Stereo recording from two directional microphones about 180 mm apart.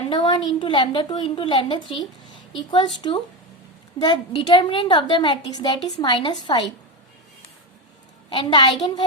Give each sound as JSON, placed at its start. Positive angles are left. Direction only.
{"t": 0.1, "sound": "a woman's voice", "side_deg": 25}
{"t": 3.9, "sound": "a woman's voice", "side_deg": 25}
{"t": 8.3, "sound": "a woman's voice", "side_deg": 25}